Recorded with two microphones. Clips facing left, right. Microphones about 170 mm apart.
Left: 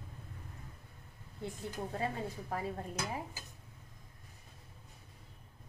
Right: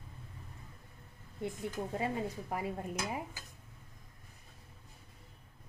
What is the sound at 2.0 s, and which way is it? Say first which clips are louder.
A woman's voice: right 2 dB; 15° right (ahead or behind).